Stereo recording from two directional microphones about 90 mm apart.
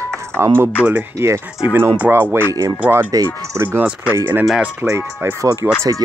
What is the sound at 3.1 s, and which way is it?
Speech, 30° right (ahead or behind).